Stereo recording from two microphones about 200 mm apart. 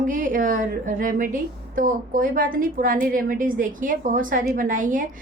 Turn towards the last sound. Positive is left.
turn(degrees=-40)  # may be behind; listen again after turning